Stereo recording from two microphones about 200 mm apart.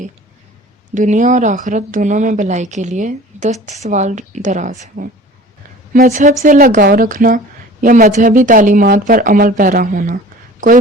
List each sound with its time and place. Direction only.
0.9 s a woman's voice: 40° right (ahead or behind)